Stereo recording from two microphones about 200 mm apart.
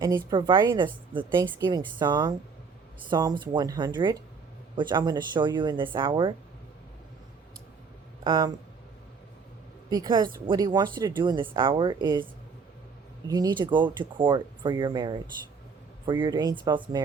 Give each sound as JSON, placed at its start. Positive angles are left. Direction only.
{"t": 0.0, "sound": "speech", "side_deg": -20}
{"t": 8.2, "sound": "speech", "side_deg": -20}
{"t": 9.9, "sound": "speech", "side_deg": -20}